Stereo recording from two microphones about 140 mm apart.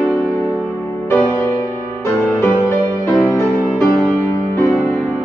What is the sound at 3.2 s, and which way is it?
Music, 20° left (ahead or behind).